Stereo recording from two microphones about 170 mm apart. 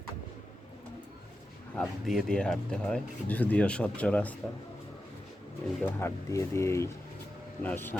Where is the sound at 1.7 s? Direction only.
Centre (ahead or behind).